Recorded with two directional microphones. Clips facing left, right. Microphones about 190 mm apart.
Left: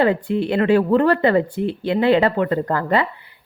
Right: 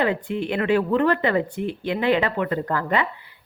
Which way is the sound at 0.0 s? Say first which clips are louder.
Left 5 dB; 35° left (ahead or behind).